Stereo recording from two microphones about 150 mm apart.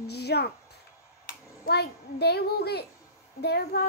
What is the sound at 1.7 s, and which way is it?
A child's voice, 90° left.